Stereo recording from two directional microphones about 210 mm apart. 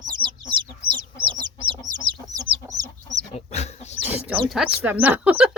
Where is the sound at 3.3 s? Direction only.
30° left (ahead or behind).